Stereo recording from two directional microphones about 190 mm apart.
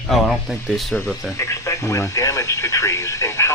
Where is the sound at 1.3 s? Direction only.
15° left (ahead or behind).